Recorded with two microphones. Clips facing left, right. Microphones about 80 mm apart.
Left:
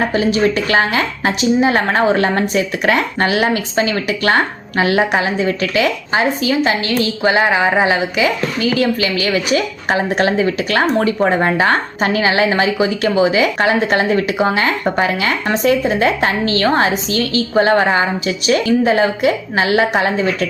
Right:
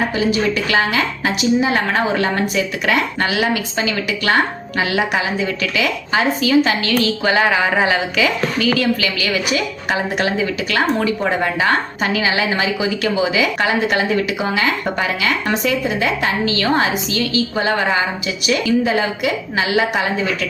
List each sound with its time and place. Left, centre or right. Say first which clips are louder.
0.5 s a woman's voice: left 2 dB; left